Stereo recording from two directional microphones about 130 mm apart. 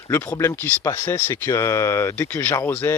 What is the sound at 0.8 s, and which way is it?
Speech, 20° left (ahead or behind).